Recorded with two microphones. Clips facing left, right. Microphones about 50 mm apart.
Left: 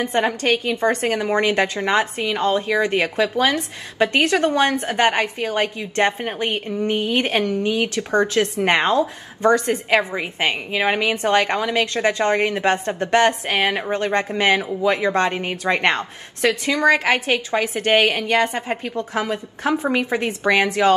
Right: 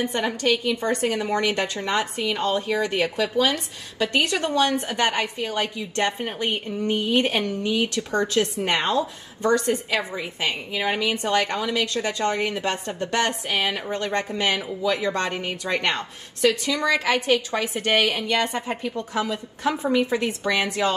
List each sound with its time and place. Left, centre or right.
0.0 s a woman's voice: left